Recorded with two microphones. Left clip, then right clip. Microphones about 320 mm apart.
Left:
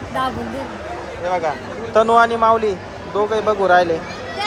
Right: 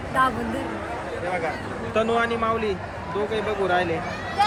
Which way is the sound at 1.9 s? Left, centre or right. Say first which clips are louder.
Left 9 dB; centre.